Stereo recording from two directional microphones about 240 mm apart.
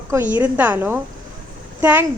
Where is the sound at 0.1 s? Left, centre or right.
Centre.